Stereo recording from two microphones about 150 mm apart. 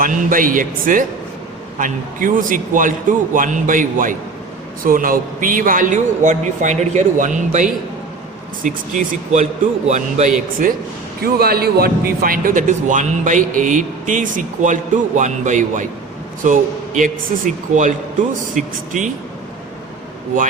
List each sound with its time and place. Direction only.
0.0 s a man's voice: 65° right (ahead or behind); by 10.3 s 50° right (ahead or behind)
11.2 s a man's voice: 90° right; by 19.1 s 60° right (ahead or behind)